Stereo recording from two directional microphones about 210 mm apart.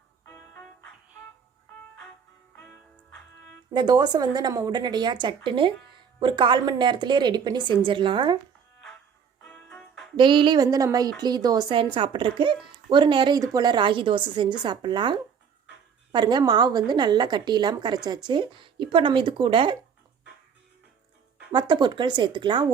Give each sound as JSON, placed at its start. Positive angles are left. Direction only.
{"t": 0.3, "sound": "music", "side_deg": 5}
{"t": 2.6, "sound": "music", "side_deg": 5}
{"t": 3.7, "sound": "a woman's voice", "side_deg": -20}
{"t": 9.4, "sound": "music", "side_deg": 5}
{"t": 10.2, "sound": "a woman's voice", "side_deg": -25}
{"t": 21.5, "sound": "a woman's voice", "side_deg": -20}